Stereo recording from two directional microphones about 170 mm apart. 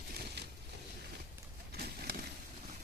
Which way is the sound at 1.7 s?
65° right (ahead or behind).